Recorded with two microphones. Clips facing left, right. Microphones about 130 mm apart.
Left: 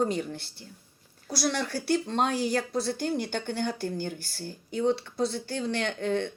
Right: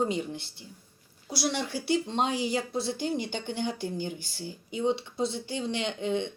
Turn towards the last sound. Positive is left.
turn(degrees=-15)  # may be behind; listen again after turning